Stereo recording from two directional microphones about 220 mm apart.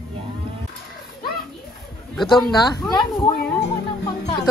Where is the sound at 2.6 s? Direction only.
20° left (ahead or behind).